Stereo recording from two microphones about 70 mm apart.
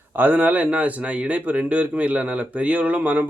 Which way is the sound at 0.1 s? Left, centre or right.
Right.